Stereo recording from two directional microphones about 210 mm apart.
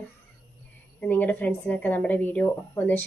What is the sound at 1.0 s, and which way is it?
A woman's voice, 10° left (ahead or behind).